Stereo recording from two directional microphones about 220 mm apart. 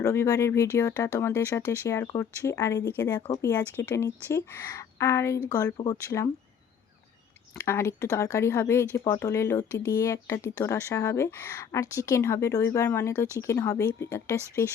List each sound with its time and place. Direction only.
0.0 s speech: 15° left (ahead or behind)
7.6 s speech: 10° left (ahead or behind)